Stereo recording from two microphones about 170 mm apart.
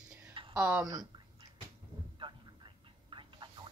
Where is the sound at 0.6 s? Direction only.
10° right (ahead or behind).